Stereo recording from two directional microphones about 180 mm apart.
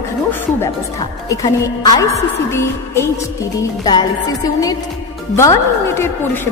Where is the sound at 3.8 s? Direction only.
20° left (ahead or behind).